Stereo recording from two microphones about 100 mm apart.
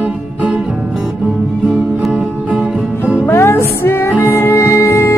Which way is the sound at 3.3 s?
25° left (ahead or behind).